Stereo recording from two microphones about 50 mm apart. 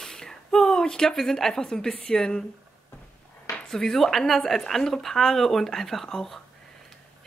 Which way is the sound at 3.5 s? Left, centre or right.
Centre.